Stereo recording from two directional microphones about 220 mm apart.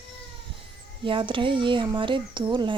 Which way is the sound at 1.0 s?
25° right (ahead or behind).